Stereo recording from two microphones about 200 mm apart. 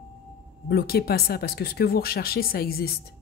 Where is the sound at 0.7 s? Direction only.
50° left (ahead or behind).